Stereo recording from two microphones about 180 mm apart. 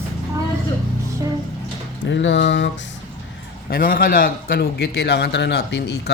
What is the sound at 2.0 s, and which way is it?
Speech, 90° left.